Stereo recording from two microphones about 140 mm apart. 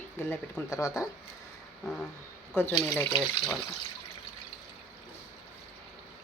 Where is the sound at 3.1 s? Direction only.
5° right (ahead or behind).